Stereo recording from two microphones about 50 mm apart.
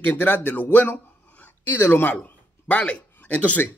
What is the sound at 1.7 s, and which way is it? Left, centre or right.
Speech, left.